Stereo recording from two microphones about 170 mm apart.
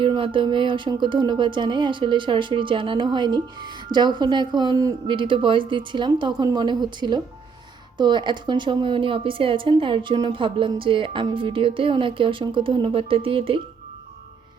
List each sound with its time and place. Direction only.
0.0 s speech: 30° right (ahead or behind)